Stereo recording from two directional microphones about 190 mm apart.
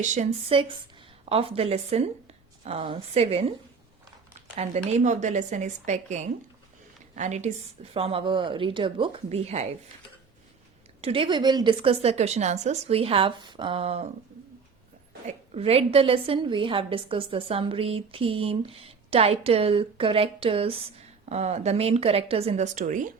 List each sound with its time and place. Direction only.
0.0 s a woman's voice: 40° right (ahead or behind)
4.5 s a woman's voice: 35° right (ahead or behind)
7.2 s a woman's voice: 35° right (ahead or behind)
11.0 s a woman's voice: 30° right (ahead or behind)
15.3 s a woman's voice: 30° right (ahead or behind)